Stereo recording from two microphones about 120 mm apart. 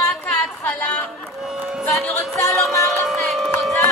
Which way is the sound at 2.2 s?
25° left (ahead or behind).